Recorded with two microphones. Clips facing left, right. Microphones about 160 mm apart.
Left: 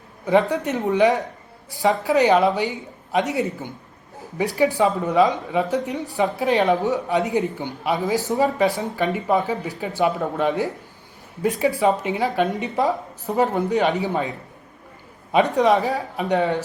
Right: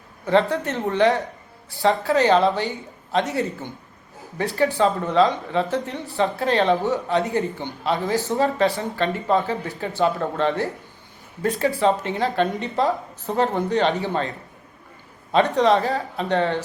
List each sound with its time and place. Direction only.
0.3 s speech: 15° left (ahead or behind)
11.8 s speech: 10° left (ahead or behind)
15.3 s speech: 15° left (ahead or behind)